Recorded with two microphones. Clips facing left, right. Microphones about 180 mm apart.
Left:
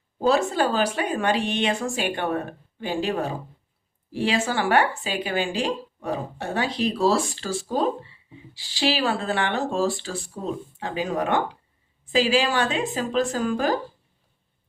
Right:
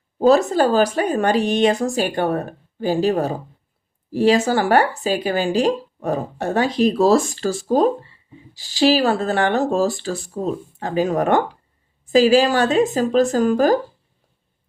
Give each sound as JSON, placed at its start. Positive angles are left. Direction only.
{"t": 0.2, "sound": "a woman's voice", "side_deg": -40}